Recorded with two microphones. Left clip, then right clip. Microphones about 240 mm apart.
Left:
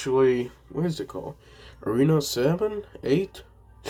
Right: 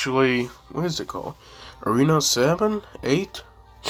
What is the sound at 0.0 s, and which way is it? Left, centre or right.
Speech, right.